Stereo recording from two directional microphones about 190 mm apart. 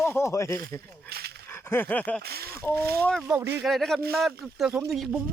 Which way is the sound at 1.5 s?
15° left (ahead or behind).